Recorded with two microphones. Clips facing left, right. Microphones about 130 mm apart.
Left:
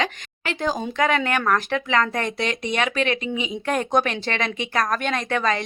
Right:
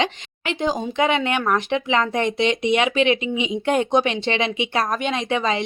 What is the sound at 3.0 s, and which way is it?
Speech, 40° left (ahead or behind).